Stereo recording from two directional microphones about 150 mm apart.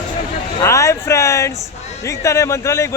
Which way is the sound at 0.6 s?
20° left (ahead or behind).